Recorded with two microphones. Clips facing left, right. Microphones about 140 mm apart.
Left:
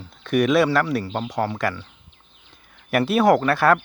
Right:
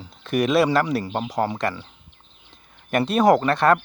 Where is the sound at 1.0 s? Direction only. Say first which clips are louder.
Right 1 dB; 15° right (ahead or behind).